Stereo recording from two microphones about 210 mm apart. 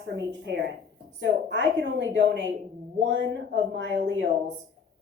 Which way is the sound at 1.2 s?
55° right (ahead or behind).